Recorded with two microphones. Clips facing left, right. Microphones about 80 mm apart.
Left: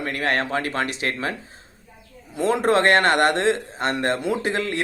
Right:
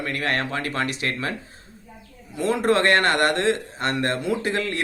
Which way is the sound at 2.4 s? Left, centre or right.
Left.